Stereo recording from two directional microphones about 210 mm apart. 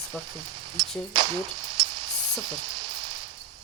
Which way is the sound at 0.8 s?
20° right (ahead or behind).